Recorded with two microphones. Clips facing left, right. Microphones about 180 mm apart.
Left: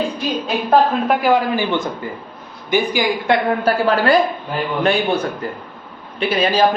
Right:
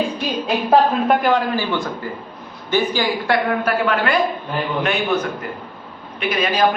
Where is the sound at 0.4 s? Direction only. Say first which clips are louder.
Even; centre (ahead or behind).